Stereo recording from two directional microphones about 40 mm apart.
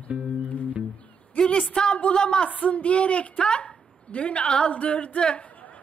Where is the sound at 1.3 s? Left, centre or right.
Left.